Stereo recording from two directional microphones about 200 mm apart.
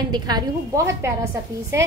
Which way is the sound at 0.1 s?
20° right (ahead or behind).